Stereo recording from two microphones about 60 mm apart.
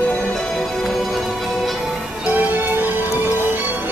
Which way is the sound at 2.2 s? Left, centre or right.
Right.